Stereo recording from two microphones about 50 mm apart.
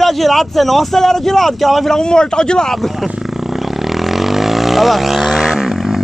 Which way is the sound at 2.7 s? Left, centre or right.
Centre.